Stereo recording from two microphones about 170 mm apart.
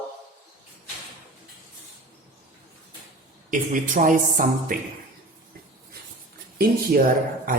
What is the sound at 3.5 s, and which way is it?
Speech, 50° right (ahead or behind).